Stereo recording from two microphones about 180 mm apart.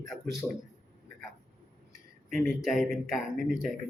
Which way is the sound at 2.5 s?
Centre (ahead or behind).